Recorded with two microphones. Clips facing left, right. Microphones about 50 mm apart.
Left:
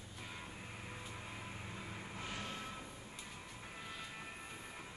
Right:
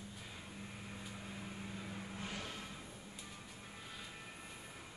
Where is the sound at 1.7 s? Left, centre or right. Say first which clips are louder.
Right 1 dB; centre.